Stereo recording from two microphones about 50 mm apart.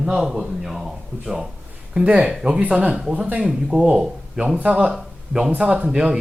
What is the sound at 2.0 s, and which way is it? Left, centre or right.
Speech, right.